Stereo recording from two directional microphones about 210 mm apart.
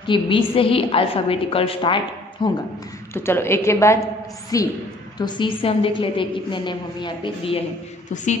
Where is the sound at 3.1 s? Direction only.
10° left (ahead or behind).